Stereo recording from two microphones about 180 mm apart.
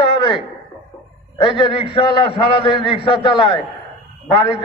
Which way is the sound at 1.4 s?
30° left (ahead or behind).